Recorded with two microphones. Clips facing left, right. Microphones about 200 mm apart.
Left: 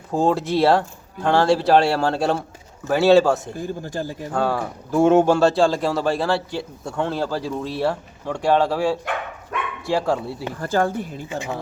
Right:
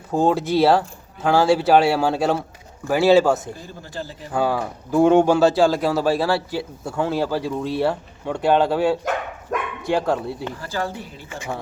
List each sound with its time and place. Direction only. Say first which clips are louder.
0.1 s speech: right 1 dB; centre (ahead or behind)
3.6 s speech: left 6 dB; 45° left (ahead or behind)
4.3 s speech: right 2 dB; 5° right (ahead or behind)
10.6 s speech: left 6 dB; 50° left (ahead or behind)